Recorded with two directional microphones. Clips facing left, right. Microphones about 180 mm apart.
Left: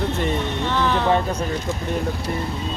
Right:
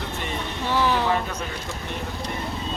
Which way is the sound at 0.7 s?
10° right (ahead or behind).